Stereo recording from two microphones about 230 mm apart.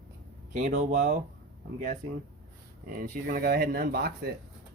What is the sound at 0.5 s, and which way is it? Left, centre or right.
Speech, right.